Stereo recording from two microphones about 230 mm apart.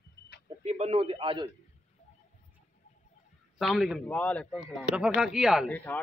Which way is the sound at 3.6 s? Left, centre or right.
Centre.